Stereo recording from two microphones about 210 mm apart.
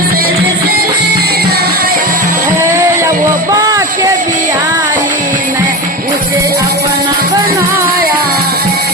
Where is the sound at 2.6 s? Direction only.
15° right (ahead or behind).